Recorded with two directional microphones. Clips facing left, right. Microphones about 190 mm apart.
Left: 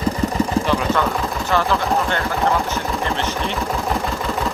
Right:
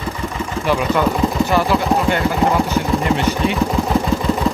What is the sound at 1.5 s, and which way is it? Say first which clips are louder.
Speech: left 1 dB; 15° right (ahead or behind).